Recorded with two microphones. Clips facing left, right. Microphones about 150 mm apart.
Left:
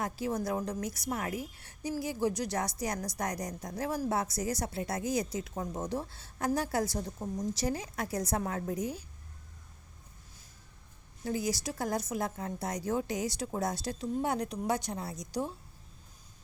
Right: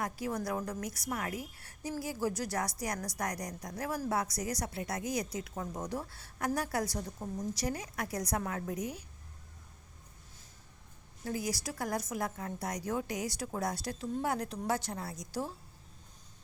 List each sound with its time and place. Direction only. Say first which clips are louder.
0.0 s a woman's voice: left 2 dB; 25° left (ahead or behind)
7.2 s a woman's voice: left 3 dB; centre (ahead or behind)
7.5 s a woman's voice: left 3 dB; 25° left (ahead or behind)
11.3 s a woman's voice: left 3 dB; 25° left (ahead or behind)